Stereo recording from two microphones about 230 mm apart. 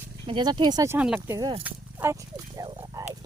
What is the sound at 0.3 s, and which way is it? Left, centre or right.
Speech, centre.